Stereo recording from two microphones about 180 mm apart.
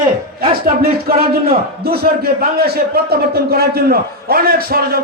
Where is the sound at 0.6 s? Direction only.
55° right (ahead or behind).